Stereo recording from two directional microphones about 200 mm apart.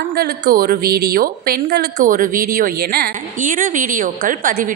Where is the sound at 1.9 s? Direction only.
40° right (ahead or behind).